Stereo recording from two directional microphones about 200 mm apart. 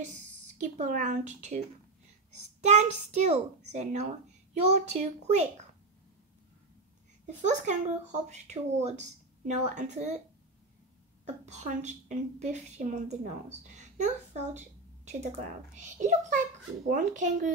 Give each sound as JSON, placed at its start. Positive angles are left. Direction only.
{"t": 0.6, "sound": "a woman's voice", "side_deg": -35}
{"t": 2.6, "sound": "a woman's voice", "side_deg": -35}
{"t": 7.4, "sound": "a woman's voice", "side_deg": -35}
{"t": 11.2, "sound": "a woman's voice", "side_deg": -35}
{"t": 15.8, "sound": "a woman's voice", "side_deg": -35}